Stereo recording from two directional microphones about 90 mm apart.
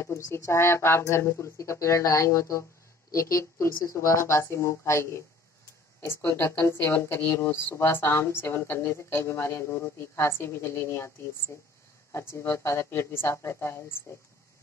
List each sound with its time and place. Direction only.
0.0 s speech: 30° left (ahead or behind)
12.1 s speech: 30° left (ahead or behind)